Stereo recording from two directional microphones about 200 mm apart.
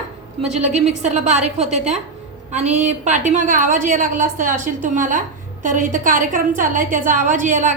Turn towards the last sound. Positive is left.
turn(degrees=-40)  # may be behind; listen again after turning